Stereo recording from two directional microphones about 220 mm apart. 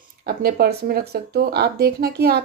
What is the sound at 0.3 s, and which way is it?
Speech, 45° right (ahead or behind).